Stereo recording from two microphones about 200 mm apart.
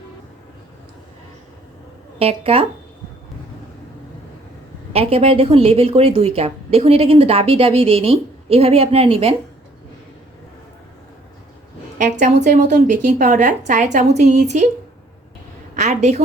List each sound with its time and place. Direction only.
2.1 s a woman's voice: 30° right (ahead or behind)
4.9 s a woman's voice: 30° right (ahead or behind)
11.9 s a woman's voice: 35° right (ahead or behind)
15.7 s a woman's voice: 35° right (ahead or behind)